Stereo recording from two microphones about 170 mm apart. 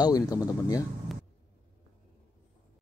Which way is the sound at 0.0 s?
20° left (ahead or behind).